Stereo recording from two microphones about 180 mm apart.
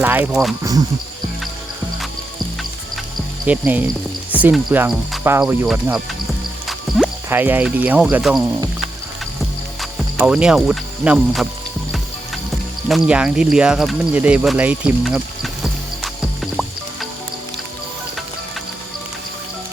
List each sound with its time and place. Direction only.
0.0 s speech: 10° right (ahead or behind)
0.6 s speech: 20° right (ahead or behind)
3.4 s speech: 10° right (ahead or behind)
6.7 s music: centre (ahead or behind)
7.3 s speech: 10° right (ahead or behind)
9.8 s speech: 5° right (ahead or behind)
13.1 s speech: 5° right (ahead or behind)
16.4 s music: centre (ahead or behind)